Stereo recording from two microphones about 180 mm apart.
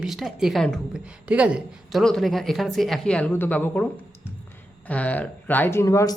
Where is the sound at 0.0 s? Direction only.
Centre (ahead or behind); by 6.1 s 15° left (ahead or behind).